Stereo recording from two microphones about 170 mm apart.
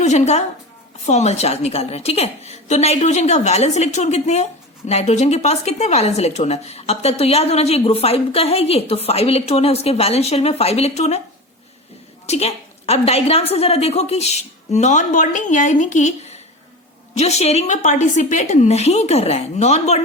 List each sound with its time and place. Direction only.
0.0 s a woman's voice: 40° left (ahead or behind)
12.2 s speech: 40° left (ahead or behind)